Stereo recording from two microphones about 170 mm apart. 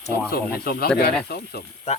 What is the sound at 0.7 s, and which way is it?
Speech, 65° left (ahead or behind).